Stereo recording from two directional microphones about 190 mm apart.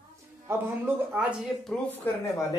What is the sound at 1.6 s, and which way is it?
Speech, centre (ahead or behind).